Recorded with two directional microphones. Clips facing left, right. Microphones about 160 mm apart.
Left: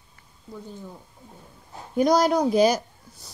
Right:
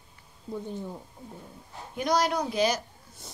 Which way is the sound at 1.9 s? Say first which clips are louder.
Left 7 dB; 40° left (ahead or behind).